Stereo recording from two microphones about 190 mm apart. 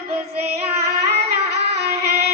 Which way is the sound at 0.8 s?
60° right (ahead or behind).